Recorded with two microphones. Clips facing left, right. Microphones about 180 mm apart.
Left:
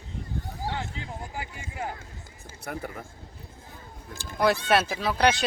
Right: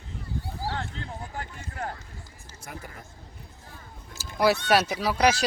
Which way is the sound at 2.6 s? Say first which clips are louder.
Left 7 dB; 60° left (ahead or behind).